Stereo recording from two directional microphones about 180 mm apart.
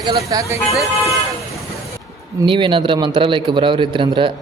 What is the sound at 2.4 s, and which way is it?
A man's voice, 30° right (ahead or behind).